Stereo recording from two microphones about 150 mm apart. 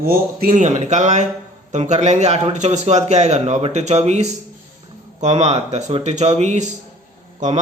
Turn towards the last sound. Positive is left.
turn(degrees=-55)  # may be behind; listen again after turning